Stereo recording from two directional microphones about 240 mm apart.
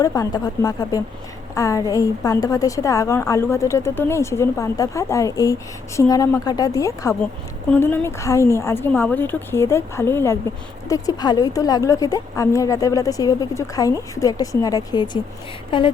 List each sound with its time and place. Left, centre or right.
0.0 s a woman's voice: centre